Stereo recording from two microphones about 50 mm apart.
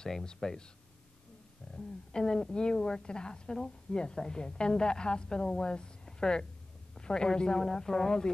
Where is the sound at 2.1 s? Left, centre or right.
Centre.